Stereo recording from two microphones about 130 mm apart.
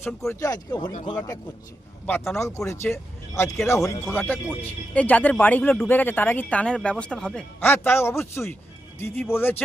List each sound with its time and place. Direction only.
0.0 s a man's voice: 25° left (ahead or behind)
2.3 s speech: 20° left (ahead or behind)